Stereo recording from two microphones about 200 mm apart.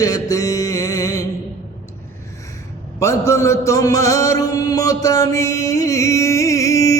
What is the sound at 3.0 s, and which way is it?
Chant, 15° left (ahead or behind).